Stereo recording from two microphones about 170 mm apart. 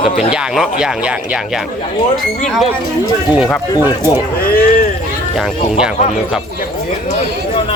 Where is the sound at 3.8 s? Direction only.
20° left (ahead or behind).